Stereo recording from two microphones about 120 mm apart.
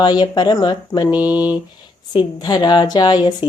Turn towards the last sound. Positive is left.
turn(degrees=35)  # may be behind; listen again after turning